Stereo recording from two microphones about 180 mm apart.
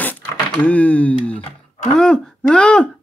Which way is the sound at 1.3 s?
35° left (ahead or behind).